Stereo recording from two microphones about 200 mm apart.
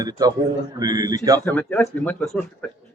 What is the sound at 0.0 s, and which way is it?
A man's voice, 20° right (ahead or behind).